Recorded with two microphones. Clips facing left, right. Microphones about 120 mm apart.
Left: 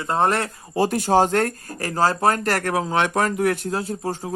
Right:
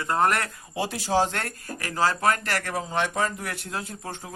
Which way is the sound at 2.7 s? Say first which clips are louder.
Left 4 dB; 85° left.